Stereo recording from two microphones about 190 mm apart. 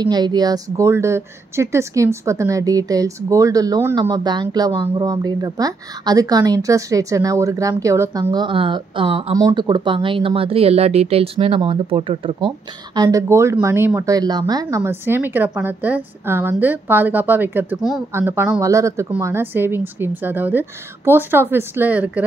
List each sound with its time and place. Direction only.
0.0 s a woman's voice: 20° right (ahead or behind)